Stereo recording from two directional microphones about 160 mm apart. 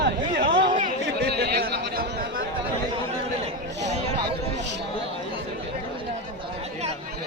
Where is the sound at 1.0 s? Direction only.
85° right; by 2.4 s 65° right (ahead or behind).